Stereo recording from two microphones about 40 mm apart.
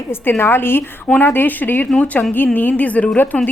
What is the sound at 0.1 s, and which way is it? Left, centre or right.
A woman's voice, left.